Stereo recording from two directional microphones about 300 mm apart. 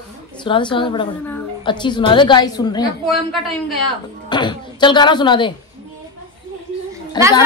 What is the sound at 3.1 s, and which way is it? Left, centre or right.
Child singing, centre.